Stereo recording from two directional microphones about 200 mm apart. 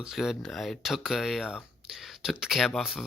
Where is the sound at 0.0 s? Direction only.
Centre (ahead or behind).